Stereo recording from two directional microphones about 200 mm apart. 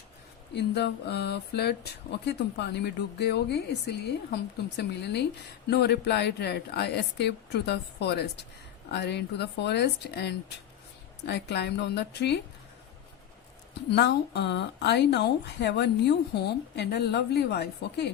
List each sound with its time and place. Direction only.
0.5 s speech: 55° left (ahead or behind)
13.7 s speech: 55° left (ahead or behind)